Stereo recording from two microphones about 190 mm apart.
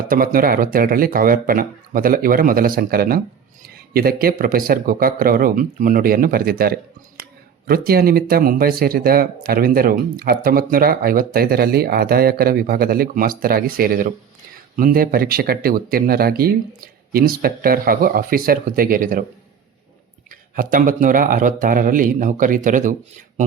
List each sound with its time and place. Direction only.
0.1 s speech: 50° right (ahead or behind)
20.6 s speech: 45° right (ahead or behind)